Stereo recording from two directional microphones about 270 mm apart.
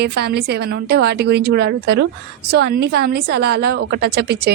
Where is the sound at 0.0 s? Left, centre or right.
Right.